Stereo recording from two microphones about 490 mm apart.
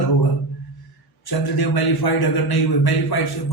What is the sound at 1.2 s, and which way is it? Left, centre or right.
A man's voice, left.